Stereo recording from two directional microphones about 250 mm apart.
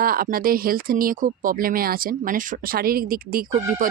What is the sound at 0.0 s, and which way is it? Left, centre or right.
Speech, right.